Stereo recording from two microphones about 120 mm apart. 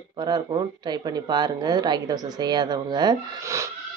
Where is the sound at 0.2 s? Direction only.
40° right (ahead or behind).